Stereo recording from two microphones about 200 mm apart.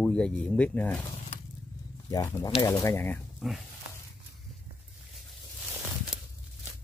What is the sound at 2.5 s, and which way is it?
Speech, 25° left (ahead or behind).